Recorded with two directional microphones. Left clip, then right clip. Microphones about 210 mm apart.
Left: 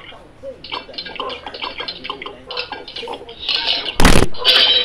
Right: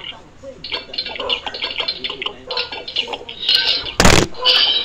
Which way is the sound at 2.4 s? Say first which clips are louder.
Right 2 dB; 15° left (ahead or behind).